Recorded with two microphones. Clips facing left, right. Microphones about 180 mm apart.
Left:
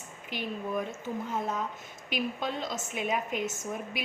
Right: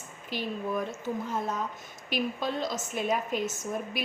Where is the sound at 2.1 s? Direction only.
40° right (ahead or behind).